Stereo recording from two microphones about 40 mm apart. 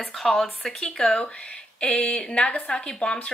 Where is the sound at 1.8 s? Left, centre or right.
Left.